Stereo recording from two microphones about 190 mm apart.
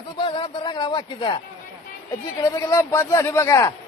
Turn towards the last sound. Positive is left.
turn(degrees=15)  # may be behind; listen again after turning